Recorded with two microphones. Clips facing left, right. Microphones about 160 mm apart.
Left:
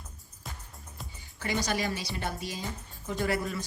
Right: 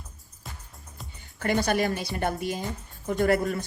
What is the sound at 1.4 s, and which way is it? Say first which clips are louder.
Speech: right 6 dB; 55° right (ahead or behind).